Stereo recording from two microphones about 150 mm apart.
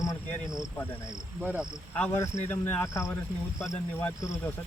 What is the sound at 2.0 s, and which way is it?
Speech, 15° left (ahead or behind).